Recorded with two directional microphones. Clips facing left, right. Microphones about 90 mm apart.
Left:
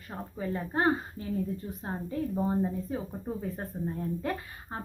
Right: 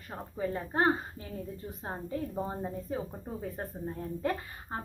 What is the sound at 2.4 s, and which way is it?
Speech, 5° right (ahead or behind).